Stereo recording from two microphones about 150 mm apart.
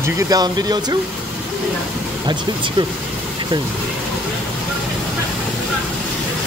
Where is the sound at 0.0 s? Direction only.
25° right (ahead or behind).